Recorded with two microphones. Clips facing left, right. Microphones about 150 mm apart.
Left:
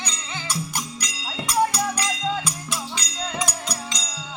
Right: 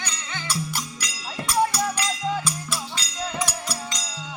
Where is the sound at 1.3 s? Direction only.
15° left (ahead or behind).